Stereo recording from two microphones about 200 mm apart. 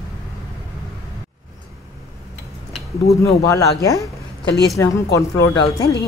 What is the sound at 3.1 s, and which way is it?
Speech, 15° left (ahead or behind).